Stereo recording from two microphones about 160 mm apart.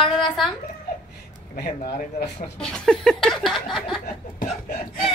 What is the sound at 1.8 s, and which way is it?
Speech, 75° left (ahead or behind).